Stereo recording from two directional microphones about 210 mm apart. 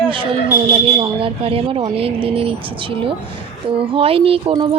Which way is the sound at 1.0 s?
25° right (ahead or behind).